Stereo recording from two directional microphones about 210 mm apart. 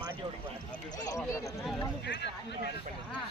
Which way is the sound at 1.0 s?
15° left (ahead or behind).